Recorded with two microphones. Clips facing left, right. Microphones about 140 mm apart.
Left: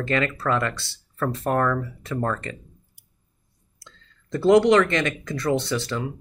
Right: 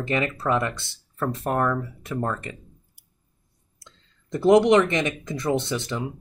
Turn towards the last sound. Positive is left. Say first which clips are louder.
# left 1 dB
turn(degrees=-20)  # may be behind; listen again after turning